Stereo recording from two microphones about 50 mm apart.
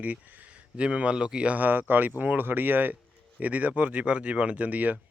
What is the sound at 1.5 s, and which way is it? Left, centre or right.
Speech, right.